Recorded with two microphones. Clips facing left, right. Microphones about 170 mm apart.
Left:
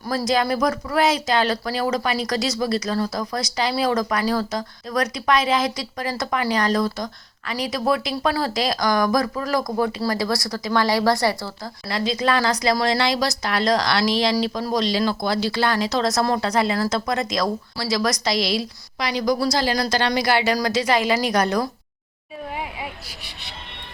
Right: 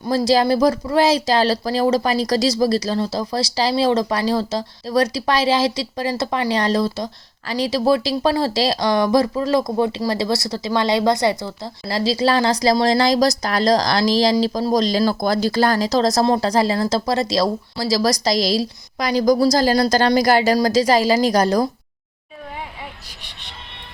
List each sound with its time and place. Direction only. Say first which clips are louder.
0.3 s speech: right 5 dB; 30° right (ahead or behind)
11.9 s a woman's voice: right 4 dB; 30° right (ahead or behind)
22.8 s vehicle: left 3 dB; 10° left (ahead or behind)